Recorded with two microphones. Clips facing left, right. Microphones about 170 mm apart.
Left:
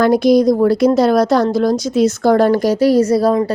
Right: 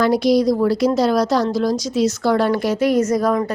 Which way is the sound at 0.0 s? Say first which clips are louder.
Left 4 dB; 50° left (ahead or behind).